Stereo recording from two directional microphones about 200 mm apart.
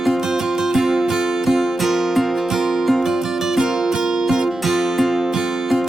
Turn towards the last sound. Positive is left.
turn(degrees=0)  # may be behind; listen again after turning